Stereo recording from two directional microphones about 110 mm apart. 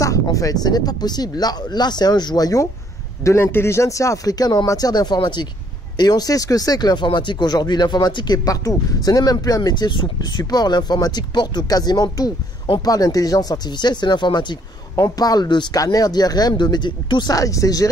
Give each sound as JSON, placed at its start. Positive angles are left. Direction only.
{"t": 0.0, "sound": "speech", "side_deg": 30}